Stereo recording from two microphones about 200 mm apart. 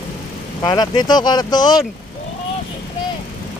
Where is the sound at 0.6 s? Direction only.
20° left (ahead or behind).